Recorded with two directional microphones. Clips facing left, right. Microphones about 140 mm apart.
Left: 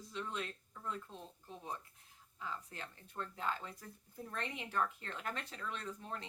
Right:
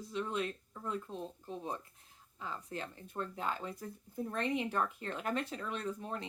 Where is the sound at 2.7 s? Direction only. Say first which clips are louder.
Right 7 dB; 20° right (ahead or behind).